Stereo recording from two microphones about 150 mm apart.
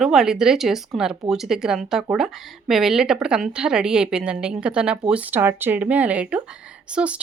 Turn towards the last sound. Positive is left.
turn(degrees=-10)  # may be behind; listen again after turning